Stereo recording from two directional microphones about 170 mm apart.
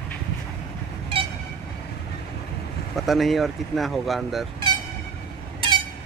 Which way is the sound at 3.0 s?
Centre (ahead or behind).